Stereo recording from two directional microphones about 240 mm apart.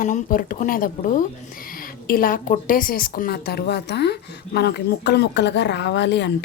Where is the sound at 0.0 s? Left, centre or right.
Left.